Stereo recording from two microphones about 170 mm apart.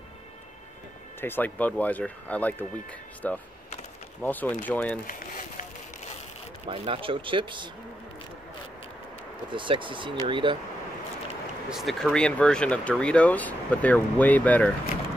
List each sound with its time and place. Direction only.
1.2 s speech: 10° left (ahead or behind)
5.0 s a sound: 50° left (ahead or behind)
6.7 s speech: 30° right (ahead or behind)
9.5 s speech: 30° right (ahead or behind)
11.7 s speech: centre (ahead or behind)